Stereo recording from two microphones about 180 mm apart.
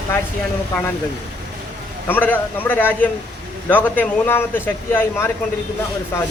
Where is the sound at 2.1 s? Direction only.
10° left (ahead or behind).